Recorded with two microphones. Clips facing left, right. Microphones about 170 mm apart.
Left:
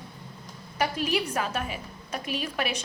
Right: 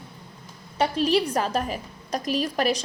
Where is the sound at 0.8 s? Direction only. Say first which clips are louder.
Right 5 dB; 30° right (ahead or behind).